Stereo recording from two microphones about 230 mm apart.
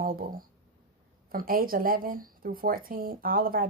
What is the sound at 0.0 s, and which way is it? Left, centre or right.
Speech, right.